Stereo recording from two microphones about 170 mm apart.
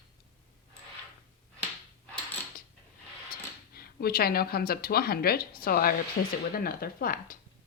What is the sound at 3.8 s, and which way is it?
A woman's voice, 65° left (ahead or behind).